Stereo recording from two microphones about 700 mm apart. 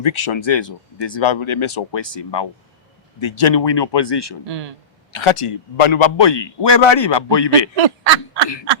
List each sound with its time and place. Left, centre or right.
0.0 s a man's voice: left
4.4 s speech: right
5.1 s a man's voice: left
7.8 s a sound: right